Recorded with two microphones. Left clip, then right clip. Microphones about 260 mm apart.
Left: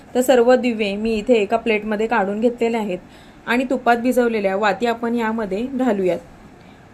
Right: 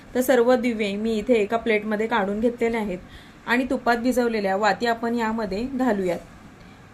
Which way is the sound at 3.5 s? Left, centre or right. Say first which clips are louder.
Left 5 dB; centre.